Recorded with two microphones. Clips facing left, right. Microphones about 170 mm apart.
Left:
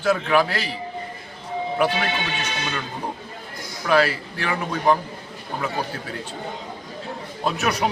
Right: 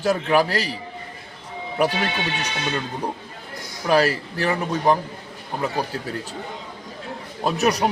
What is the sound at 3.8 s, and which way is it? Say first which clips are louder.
A man's voice: right 1 dB; 40° right (ahead or behind).